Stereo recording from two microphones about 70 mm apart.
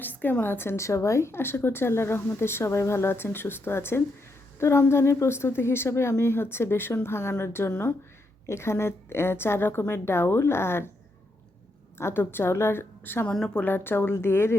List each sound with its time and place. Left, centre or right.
0.0 s a woman's voice: left
11.9 s a woman's voice: left
13.2 s a woman's voice: centre
13.7 s a woman's voice: left